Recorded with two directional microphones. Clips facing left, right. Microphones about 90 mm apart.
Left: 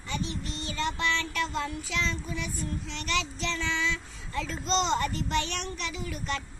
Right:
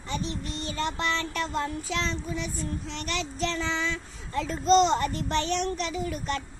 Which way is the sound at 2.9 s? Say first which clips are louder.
Left 1 dB; 40° right (ahead or behind).